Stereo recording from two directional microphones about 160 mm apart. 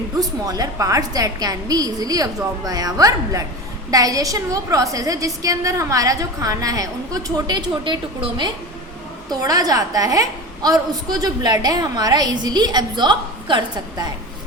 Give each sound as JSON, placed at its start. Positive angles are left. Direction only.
{"t": 0.2, "sound": "a woman's voice", "side_deg": -25}